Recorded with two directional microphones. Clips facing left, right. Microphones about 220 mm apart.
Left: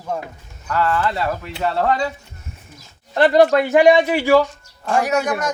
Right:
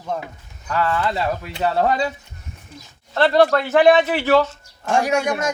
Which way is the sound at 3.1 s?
15° left (ahead or behind).